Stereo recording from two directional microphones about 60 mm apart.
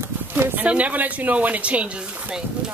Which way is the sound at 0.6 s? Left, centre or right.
Right.